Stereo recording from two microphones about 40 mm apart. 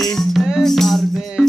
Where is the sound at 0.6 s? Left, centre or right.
Centre.